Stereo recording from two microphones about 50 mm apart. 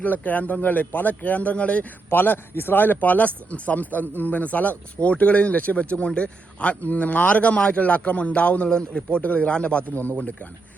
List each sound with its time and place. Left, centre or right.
0.0 s speech: left
2.0 s a man's voice: left
9.9 s speech: left